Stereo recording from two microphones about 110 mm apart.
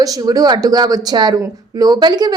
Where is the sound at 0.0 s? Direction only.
35° right (ahead or behind).